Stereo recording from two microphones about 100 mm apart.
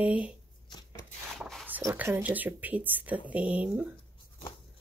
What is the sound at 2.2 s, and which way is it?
Speech, 15° right (ahead or behind).